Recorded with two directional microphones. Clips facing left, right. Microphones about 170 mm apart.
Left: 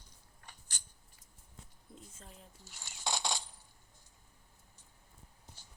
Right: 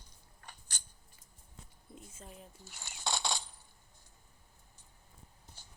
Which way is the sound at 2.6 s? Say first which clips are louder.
Right 3 dB; 60° right (ahead or behind).